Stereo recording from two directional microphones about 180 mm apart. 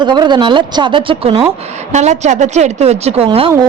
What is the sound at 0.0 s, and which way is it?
A woman's voice, 25° right (ahead or behind).